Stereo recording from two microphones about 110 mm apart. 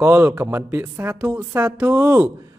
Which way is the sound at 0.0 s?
20° right (ahead or behind).